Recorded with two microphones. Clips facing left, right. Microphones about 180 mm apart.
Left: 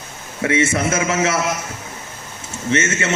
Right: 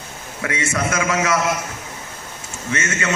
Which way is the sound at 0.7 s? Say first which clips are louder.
Left 2 dB; 25° left (ahead or behind).